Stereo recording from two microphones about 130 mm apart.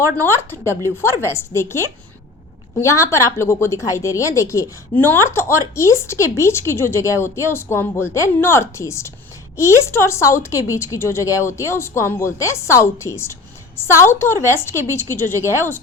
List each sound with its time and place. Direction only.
0.3 s a woman's voice: 20° left (ahead or behind)